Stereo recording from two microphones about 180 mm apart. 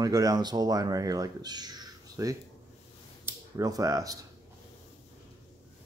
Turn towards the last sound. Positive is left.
turn(degrees=-20)  # may be behind; listen again after turning